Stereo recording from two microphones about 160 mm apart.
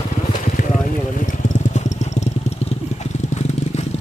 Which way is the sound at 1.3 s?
50° left (ahead or behind).